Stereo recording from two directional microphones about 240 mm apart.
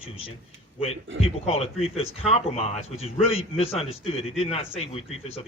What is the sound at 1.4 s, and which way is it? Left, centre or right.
Speech, left.